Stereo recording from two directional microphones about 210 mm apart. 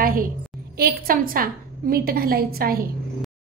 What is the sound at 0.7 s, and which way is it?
A woman's voice, 45° right (ahead or behind).